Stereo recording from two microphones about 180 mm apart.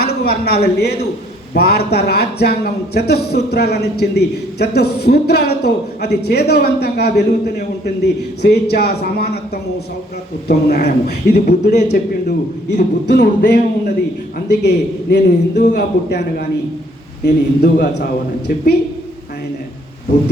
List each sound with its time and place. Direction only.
0.0 s speech: 60° left (ahead or behind)
10.5 s speech: 60° left (ahead or behind)
12.7 s speech: 70° left (ahead or behind)